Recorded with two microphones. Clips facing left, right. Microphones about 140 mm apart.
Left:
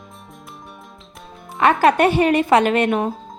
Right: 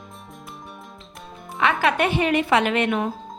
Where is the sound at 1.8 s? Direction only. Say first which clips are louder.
Left 7 dB; 40° left (ahead or behind).